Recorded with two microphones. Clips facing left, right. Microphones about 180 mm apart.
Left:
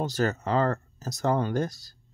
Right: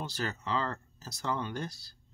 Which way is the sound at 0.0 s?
45° left (ahead or behind).